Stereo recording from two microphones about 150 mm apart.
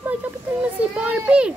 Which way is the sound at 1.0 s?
10° right (ahead or behind).